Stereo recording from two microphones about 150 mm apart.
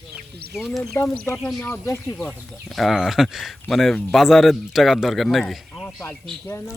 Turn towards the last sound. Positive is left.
turn(degrees=10)  # may be behind; listen again after turning